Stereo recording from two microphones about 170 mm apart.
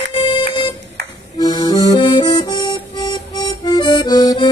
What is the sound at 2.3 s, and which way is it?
Music, 25° left (ahead or behind).